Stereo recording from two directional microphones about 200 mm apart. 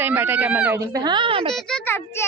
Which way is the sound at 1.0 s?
25° right (ahead or behind).